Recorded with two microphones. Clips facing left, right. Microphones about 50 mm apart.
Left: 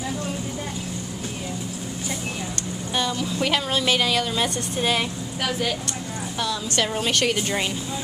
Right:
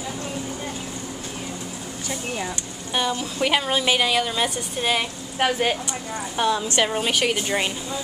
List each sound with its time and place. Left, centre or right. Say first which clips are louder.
2.9 s a woman's voice: right 1 dB; centre
5.4 s a woman's voice: right 5 dB; right
6.8 s a woman's voice: left 2 dB; centre